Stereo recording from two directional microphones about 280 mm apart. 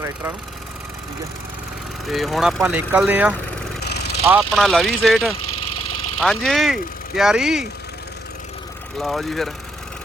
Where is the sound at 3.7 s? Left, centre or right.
Left.